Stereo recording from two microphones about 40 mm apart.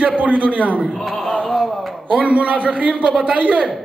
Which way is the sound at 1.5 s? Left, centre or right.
Centre.